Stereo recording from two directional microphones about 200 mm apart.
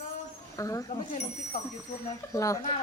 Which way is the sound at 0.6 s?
15° left (ahead or behind).